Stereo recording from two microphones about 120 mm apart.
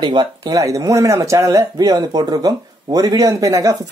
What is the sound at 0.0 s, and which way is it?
Speech, 40° right (ahead or behind).